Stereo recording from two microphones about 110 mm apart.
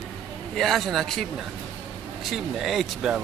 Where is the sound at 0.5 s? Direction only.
Centre (ahead or behind).